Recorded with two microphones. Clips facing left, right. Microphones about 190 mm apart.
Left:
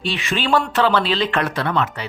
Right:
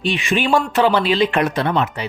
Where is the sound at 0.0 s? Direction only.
15° right (ahead or behind).